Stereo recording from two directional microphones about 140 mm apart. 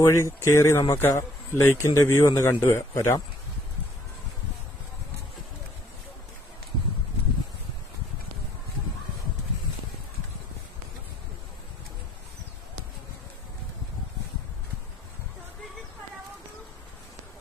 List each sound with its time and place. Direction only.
0.0 s speech: 20° left (ahead or behind)